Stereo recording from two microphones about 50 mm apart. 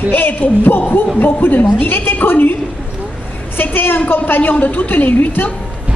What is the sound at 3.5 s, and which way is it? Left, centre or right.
A woman's voice, left.